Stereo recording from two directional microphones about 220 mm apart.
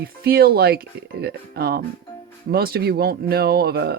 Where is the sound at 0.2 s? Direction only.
45° right (ahead or behind).